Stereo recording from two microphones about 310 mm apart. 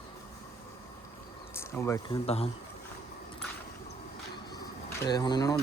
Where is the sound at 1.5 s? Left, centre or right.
Centre.